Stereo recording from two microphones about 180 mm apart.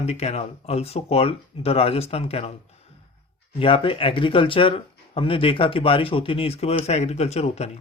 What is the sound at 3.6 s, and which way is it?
Speech, 30° left (ahead or behind).